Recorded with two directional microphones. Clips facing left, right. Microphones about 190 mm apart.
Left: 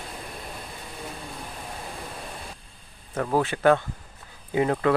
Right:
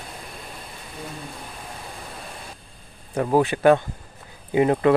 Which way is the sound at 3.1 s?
15° right (ahead or behind).